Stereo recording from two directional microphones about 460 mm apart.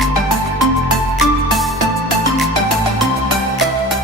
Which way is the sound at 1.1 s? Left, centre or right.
Centre.